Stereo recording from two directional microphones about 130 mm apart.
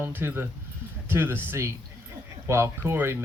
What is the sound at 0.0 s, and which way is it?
Speech, 15° right (ahead or behind).